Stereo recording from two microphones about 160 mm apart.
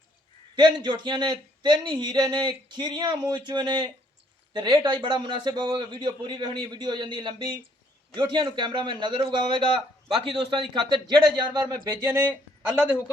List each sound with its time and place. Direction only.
0.5 s speech: 30° right (ahead or behind)